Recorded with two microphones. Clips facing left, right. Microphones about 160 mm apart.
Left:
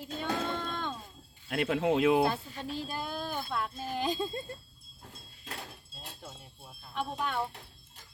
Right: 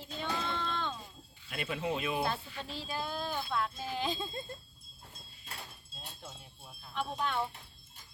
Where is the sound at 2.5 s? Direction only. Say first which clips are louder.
Left 5 dB; 45° left (ahead or behind).